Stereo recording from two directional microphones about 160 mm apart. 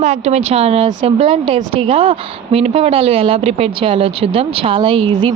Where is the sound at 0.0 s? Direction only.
45° right (ahead or behind).